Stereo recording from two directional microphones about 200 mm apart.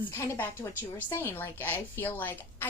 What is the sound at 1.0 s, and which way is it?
A woman's voice, 10° left (ahead or behind).